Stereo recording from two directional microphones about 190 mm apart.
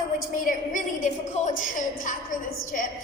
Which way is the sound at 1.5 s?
45° left (ahead or behind).